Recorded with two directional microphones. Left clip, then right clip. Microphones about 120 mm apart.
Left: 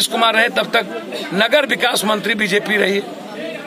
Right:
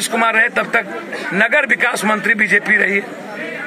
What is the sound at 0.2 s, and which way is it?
A man's voice, 30° left (ahead or behind).